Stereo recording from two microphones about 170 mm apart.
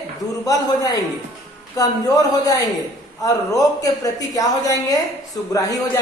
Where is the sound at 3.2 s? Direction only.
20° left (ahead or behind).